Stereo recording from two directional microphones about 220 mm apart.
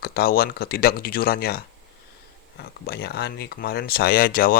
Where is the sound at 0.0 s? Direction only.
45° left (ahead or behind).